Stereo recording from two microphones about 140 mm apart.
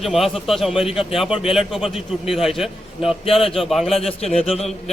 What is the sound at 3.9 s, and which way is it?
Speech, 45° left (ahead or behind).